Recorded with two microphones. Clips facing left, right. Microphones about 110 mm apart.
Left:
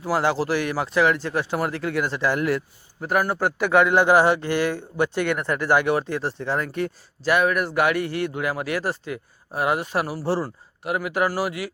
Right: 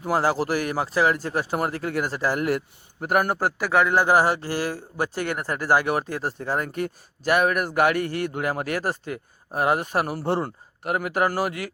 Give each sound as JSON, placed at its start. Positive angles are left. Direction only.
{"t": 0.2, "sound": "a man's voice", "side_deg": -40}
{"t": 3.9, "sound": "a man's voice", "side_deg": -40}